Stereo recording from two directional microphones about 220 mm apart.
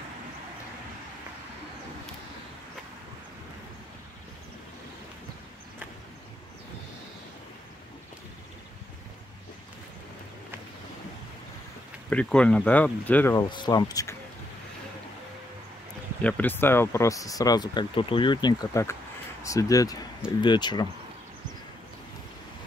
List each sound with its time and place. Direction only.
12.1 s speech: 5° left (ahead or behind)
16.2 s speech: 5° left (ahead or behind)